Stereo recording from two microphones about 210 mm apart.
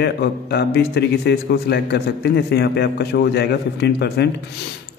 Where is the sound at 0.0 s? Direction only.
50° left (ahead or behind).